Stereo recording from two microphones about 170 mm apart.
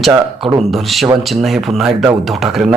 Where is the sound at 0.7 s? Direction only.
Centre (ahead or behind).